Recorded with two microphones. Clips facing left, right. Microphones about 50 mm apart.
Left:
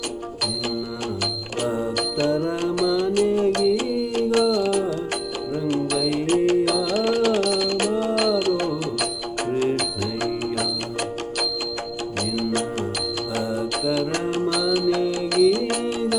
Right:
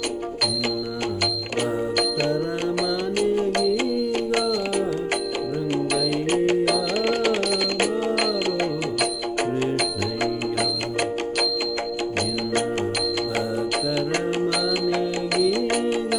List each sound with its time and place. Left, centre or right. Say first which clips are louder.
2.0 s music: left 1 dB; right
12.2 s music: left 2 dB; right